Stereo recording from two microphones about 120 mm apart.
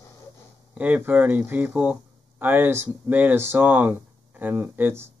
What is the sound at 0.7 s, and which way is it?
Speech, 10° right (ahead or behind).